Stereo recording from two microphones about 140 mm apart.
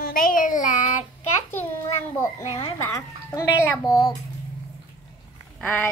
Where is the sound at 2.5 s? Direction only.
40° left (ahead or behind).